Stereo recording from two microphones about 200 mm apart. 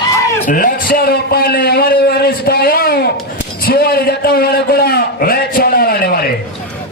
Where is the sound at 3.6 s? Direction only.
50° left (ahead or behind).